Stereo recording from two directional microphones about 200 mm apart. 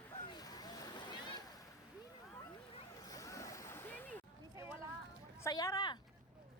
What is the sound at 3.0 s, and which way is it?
Vehicle, 15° left (ahead or behind).